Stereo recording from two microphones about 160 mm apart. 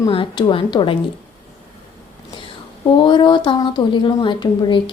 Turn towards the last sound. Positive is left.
turn(degrees=30)  # may be behind; listen again after turning